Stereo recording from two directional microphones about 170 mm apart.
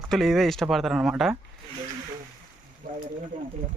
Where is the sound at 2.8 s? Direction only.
60° right (ahead or behind).